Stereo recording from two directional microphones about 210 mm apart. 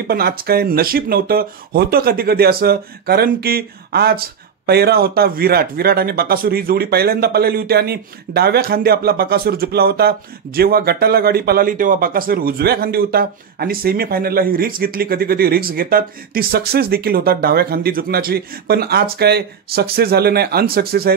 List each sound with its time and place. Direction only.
0.0 s speech: 45° right (ahead or behind)